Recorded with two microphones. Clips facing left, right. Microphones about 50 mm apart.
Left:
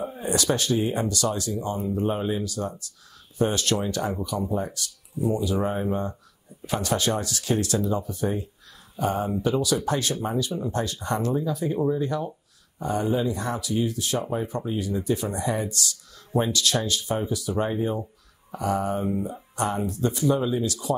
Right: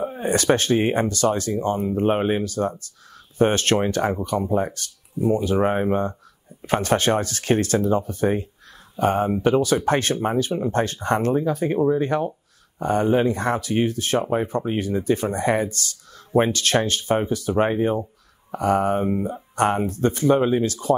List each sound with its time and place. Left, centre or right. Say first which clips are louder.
0.1 s speech: right 6 dB; right
2.4 s speech: right 6 dB; right